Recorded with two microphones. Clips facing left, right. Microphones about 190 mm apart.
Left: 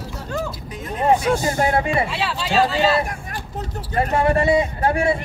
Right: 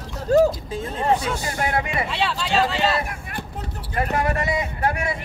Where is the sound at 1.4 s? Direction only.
25° left (ahead or behind).